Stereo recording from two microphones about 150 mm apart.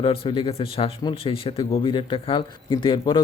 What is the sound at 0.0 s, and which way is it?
Speech, 35° left (ahead or behind).